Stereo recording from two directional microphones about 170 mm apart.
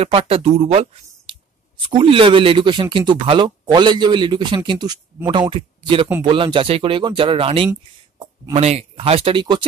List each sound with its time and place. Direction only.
0.0 s speech: 35° right (ahead or behind)